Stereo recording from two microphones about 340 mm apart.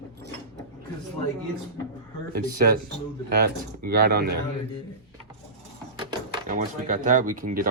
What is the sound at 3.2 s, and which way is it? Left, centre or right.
Speech, right.